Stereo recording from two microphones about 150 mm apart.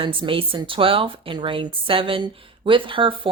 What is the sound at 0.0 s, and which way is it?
Speech, 35° right (ahead or behind).